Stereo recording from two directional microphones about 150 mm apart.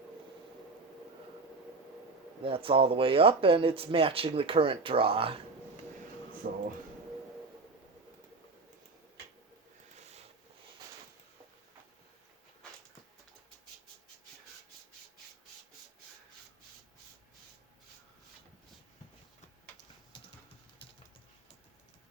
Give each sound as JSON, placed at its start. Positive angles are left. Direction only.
{"t": 2.4, "sound": "speech", "side_deg": -35}
{"t": 6.4, "sound": "speech", "side_deg": -80}